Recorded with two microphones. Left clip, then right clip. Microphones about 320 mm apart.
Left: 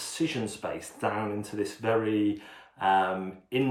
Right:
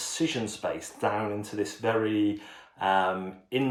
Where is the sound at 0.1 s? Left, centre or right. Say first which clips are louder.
Right 1 dB; centre.